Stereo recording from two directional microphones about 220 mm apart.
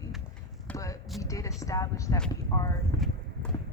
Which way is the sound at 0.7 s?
15° left (ahead or behind).